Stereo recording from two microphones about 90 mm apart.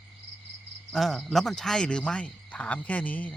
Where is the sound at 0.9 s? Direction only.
Centre (ahead or behind).